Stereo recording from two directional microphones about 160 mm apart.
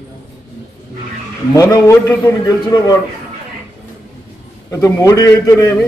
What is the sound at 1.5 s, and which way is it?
A man's voice, 20° left (ahead or behind).